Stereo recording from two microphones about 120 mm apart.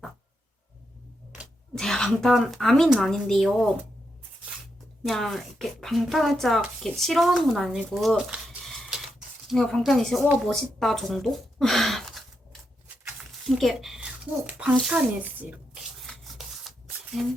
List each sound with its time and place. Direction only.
1.7 s speech: 5° left (ahead or behind)
5.0 s speech: centre (ahead or behind)
13.6 s speech: centre (ahead or behind)
14.8 s speech: 15° right (ahead or behind)
16.4 s rub: centre (ahead or behind)
17.2 s speech: centre (ahead or behind)